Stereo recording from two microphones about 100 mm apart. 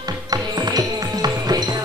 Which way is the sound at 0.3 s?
40° right (ahead or behind).